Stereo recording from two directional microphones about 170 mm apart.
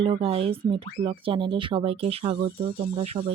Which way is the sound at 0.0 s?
35° right (ahead or behind).